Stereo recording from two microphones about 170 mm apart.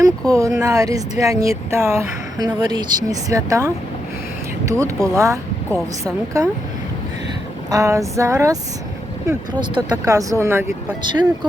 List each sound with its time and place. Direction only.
0.0 s speech: 20° right (ahead or behind)
7.7 s speech: 20° right (ahead or behind)
11.0 s speech: 25° right (ahead or behind)